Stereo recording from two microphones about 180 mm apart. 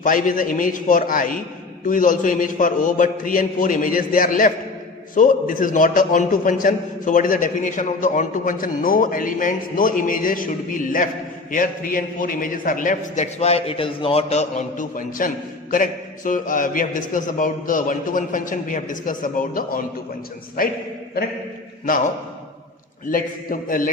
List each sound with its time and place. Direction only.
0.0 s a man's voice: 50° left (ahead or behind)
23.0 s a man's voice: 50° left (ahead or behind)